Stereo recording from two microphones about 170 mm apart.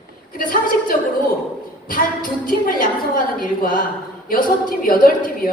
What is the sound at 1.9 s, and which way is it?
A woman's voice, 55° left (ahead or behind).